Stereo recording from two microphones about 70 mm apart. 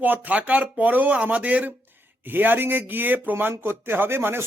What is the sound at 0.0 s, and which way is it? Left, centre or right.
Speech, right.